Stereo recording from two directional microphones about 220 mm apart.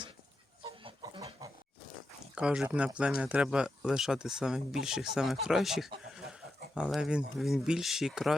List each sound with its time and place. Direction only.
0.6 s chicken: 20° right (ahead or behind)
2.3 s speech: 5° right (ahead or behind)